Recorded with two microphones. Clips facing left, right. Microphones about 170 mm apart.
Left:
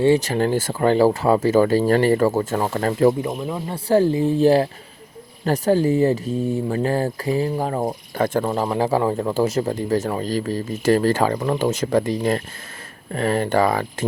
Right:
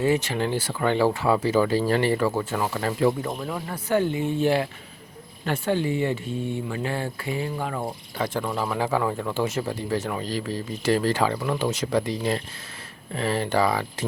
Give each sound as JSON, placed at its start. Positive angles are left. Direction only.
{"t": 0.0, "sound": "speech", "side_deg": 35}
{"t": 3.2, "sound": "speech", "side_deg": 15}
{"t": 3.8, "sound": "speech", "side_deg": 35}